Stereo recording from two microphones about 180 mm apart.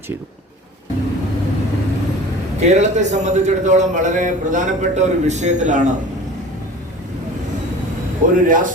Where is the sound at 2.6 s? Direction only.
40° right (ahead or behind).